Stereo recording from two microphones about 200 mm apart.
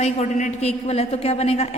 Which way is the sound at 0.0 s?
35° left (ahead or behind).